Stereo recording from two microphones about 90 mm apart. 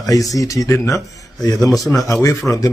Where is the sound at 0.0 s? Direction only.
40° left (ahead or behind).